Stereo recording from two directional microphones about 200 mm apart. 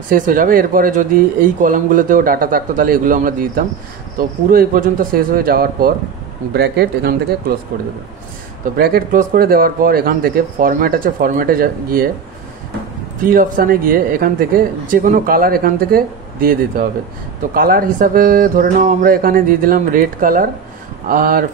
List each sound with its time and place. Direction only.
0.1 s speech: 45° right (ahead or behind)
8.7 s speech: 50° right (ahead or behind)
13.3 s speech: 45° right (ahead or behind)